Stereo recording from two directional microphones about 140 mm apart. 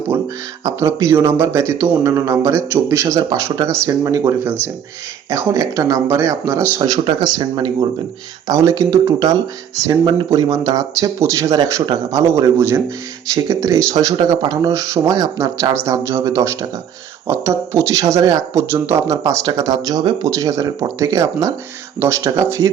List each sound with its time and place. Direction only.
0.6 s speech: 20° right (ahead or behind)